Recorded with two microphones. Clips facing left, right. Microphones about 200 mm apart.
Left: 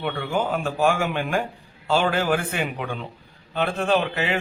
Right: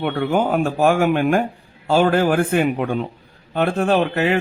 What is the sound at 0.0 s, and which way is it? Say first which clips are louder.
A man's voice: right 6 dB; 55° right (ahead or behind).